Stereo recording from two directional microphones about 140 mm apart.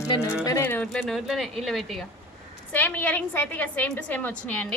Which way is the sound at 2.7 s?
15° left (ahead or behind).